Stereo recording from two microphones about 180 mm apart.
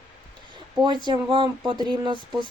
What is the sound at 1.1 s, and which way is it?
Speech, 25° right (ahead or behind).